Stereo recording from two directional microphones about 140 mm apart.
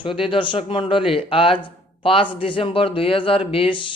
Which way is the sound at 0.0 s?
35° left (ahead or behind).